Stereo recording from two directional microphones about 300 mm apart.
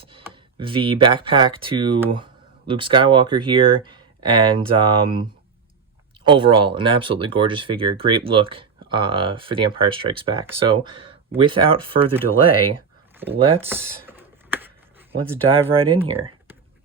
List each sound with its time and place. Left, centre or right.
0.0 s computer keyboard: centre
0.3 s speech: centre
6.2 s speech: centre
13.3 s speech: centre
14.0 s a sound: centre
15.4 s speech: centre